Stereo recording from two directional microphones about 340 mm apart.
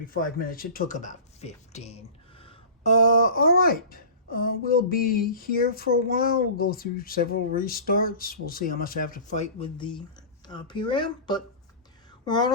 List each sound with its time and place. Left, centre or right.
0.1 s speech: left